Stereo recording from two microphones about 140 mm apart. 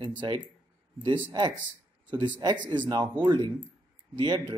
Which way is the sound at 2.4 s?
30° right (ahead or behind).